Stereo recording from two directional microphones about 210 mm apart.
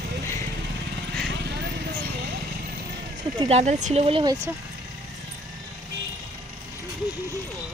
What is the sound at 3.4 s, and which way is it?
Speech, 30° right (ahead or behind).